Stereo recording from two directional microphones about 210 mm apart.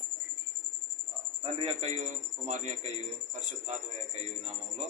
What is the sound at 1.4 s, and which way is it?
A man's voice, 30° right (ahead or behind).